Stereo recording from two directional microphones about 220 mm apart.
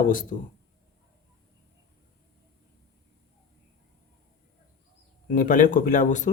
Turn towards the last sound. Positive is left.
turn(degrees=35)  # may be behind; listen again after turning